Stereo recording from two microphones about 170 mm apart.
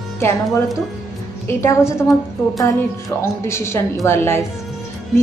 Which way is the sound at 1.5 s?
15° left (ahead or behind).